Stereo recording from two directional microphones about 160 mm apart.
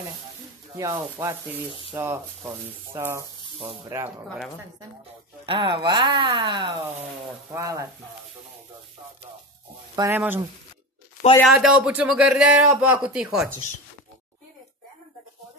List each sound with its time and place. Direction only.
0.7 s speech: 20° right (ahead or behind)
5.5 s speech: 30° right (ahead or behind)
9.9 s speech: 15° right (ahead or behind)
11.4 s speech: 5° right (ahead or behind)